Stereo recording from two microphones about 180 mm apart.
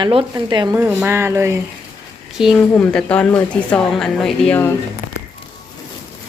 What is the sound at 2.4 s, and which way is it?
Speech, 5° left (ahead or behind).